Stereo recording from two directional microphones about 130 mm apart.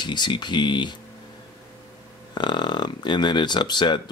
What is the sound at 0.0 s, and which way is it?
Speech, 35° left (ahead or behind).